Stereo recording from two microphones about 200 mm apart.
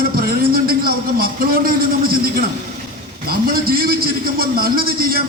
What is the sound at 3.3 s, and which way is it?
A man's voice, 50° right (ahead or behind).